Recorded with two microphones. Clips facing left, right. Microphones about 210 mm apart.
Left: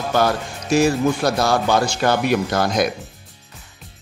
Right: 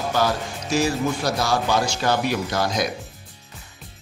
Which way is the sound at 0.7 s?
55° left (ahead or behind).